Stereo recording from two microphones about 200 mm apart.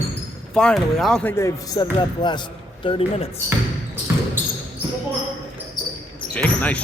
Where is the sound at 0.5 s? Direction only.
Centre (ahead or behind); by 3.2 s 25° left (ahead or behind).